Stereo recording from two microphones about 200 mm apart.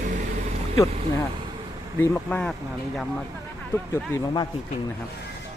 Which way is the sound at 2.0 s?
10° left (ahead or behind).